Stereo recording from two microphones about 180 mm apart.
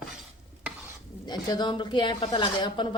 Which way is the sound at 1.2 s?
25° left (ahead or behind).